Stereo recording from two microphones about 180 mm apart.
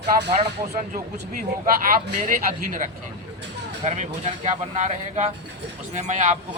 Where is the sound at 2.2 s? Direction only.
45° right (ahead or behind).